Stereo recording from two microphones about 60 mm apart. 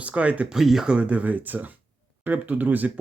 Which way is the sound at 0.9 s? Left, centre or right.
Right.